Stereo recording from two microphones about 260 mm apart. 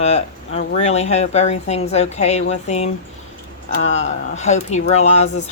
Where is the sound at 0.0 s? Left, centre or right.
Left.